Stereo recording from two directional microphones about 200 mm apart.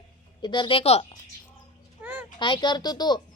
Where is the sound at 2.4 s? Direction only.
20° left (ahead or behind).